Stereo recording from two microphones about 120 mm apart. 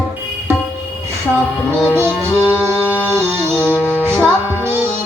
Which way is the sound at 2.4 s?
20° left (ahead or behind).